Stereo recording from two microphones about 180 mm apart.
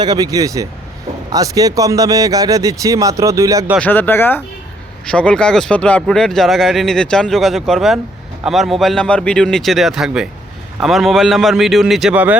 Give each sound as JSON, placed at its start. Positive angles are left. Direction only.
{"t": 0.0, "sound": "speech", "side_deg": -20}
{"t": 3.8, "sound": "speech", "side_deg": 10}